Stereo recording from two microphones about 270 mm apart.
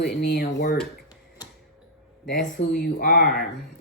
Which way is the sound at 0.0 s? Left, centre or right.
Left.